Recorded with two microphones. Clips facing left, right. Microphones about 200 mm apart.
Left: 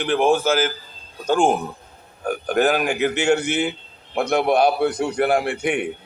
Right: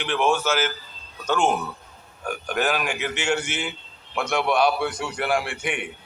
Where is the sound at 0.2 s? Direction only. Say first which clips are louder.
Left 3 dB; 55° left (ahead or behind).